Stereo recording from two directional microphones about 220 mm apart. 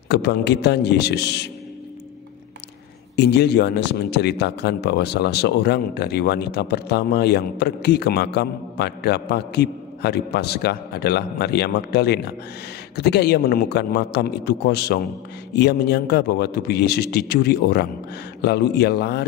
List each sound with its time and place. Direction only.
0.1 s a man's voice: 50° left (ahead or behind)
3.2 s a man's voice: 50° left (ahead or behind)